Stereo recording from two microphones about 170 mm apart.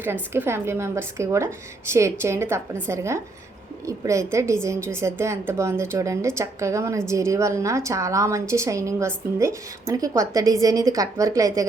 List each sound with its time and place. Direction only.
0.0 s a woman's voice: 15° right (ahead or behind)